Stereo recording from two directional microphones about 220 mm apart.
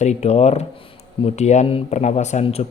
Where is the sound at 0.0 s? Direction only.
30° left (ahead or behind).